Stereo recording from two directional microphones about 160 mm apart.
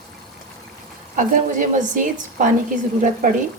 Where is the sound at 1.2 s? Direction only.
55° right (ahead or behind).